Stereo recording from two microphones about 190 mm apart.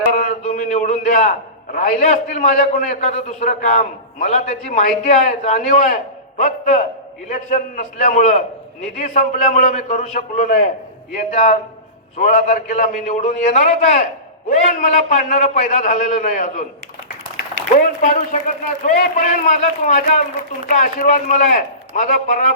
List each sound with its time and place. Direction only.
0.1 s a sound: 45° left (ahead or behind)
1.7 s a man's voice: 40° left (ahead or behind)
17.7 s a man's voice: 45° left (ahead or behind)